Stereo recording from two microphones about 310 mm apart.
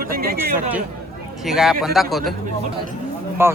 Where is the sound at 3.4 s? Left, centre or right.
Centre.